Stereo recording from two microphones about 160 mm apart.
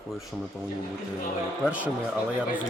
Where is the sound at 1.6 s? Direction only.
10° right (ahead or behind).